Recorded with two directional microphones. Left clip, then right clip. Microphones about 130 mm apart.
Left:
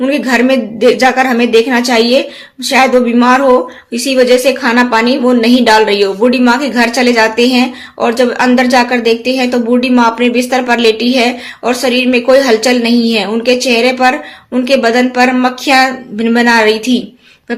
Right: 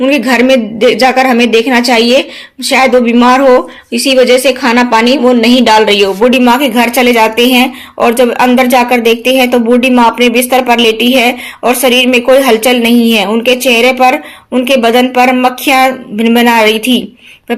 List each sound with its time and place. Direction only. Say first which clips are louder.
0.0 s a woman's voice: right 3 dB; 45° right (ahead or behind)